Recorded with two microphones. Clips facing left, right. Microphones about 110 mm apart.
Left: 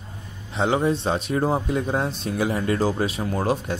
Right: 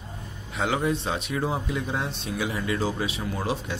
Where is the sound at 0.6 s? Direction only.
30° left (ahead or behind).